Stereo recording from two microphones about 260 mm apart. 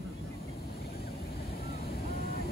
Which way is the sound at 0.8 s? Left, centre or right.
Left.